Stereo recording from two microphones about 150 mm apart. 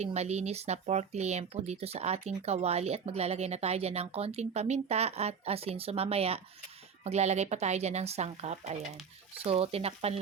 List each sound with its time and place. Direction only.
0.0 s speech: 45° right (ahead or behind)